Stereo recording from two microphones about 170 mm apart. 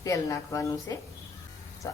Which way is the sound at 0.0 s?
20° left (ahead or behind).